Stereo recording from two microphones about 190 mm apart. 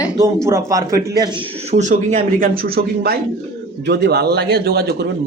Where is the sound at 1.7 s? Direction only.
40° right (ahead or behind).